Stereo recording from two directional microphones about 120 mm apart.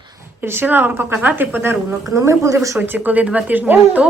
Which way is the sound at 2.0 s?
25° right (ahead or behind).